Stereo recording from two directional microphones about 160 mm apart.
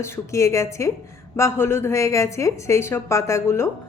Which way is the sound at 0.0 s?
20° left (ahead or behind).